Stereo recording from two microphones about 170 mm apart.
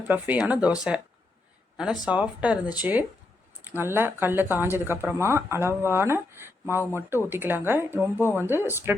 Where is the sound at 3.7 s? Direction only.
15° right (ahead or behind).